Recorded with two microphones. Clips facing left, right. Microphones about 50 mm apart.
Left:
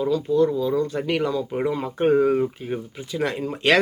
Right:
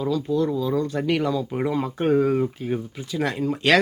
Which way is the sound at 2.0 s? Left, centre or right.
Centre.